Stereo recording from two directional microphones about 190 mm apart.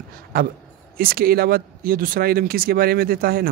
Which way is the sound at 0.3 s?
50° right (ahead or behind).